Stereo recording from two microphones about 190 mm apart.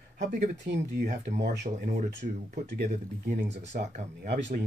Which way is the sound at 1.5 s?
65° right (ahead or behind).